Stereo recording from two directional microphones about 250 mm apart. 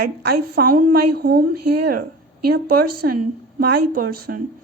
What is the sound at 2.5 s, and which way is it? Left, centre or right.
A woman's voice, right.